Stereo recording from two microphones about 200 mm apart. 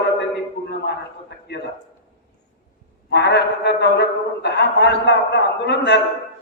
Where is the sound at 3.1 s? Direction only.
60° left (ahead or behind).